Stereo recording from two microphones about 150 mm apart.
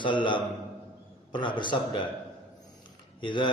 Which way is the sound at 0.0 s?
30° left (ahead or behind).